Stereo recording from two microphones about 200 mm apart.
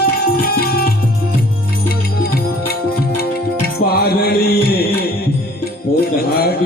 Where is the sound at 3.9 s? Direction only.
50° left (ahead or behind).